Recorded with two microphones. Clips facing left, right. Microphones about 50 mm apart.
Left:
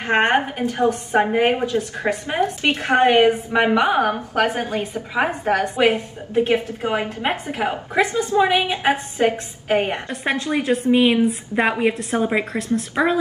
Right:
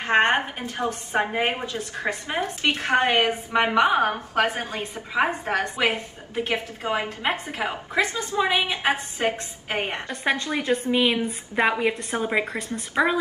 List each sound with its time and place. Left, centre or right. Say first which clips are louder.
0.0 s a woman's voice: left 2 dB; left
3.5 s speech: right 1 dB; centre
4.4 s a woman's voice: left 3 dB; left
10.2 s a woman's voice: left 3 dB; centre